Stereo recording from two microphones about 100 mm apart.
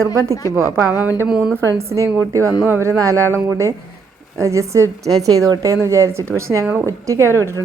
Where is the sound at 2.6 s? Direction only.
25° right (ahead or behind).